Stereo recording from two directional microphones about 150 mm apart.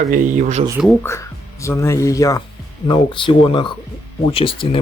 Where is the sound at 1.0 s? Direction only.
20° left (ahead or behind).